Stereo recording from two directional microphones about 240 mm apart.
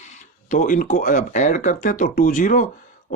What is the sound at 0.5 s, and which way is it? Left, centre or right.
Speech, left.